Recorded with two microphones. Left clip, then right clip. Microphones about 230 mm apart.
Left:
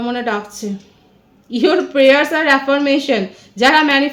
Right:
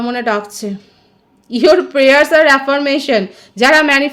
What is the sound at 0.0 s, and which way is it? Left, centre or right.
A woman's voice, right.